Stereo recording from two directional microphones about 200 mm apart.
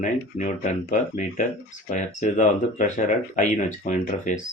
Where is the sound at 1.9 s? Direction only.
40° left (ahead or behind).